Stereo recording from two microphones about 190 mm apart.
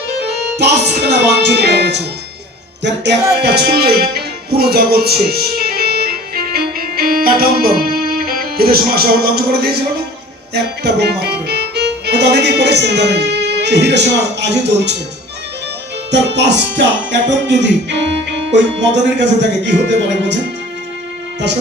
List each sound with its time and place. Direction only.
1.0 s speech: 60° right (ahead or behind)
16.1 s music: 65° right (ahead or behind)
18.5 s speech: 70° right (ahead or behind)